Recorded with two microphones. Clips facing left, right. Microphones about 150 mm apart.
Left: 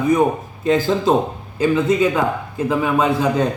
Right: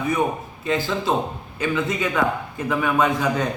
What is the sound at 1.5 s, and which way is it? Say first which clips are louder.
A man's voice: left 8 dB; 30° left (ahead or behind).